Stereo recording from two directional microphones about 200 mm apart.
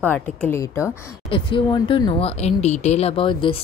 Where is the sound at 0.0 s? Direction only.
5° left (ahead or behind).